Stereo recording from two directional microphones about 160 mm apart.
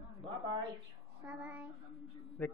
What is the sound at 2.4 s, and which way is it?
Speech, 10° left (ahead or behind).